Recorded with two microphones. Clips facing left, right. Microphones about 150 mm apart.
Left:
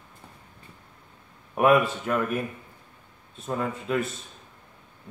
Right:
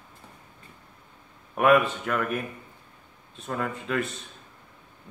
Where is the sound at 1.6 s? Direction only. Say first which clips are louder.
Even; 20° left (ahead or behind).